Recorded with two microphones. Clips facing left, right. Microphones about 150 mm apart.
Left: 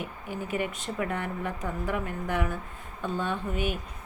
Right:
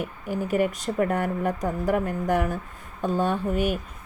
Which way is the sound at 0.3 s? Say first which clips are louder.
Right 8 dB; 40° right (ahead or behind).